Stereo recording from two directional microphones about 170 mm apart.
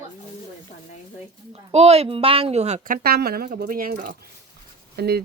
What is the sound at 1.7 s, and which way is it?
A woman's voice, 35° right (ahead or behind).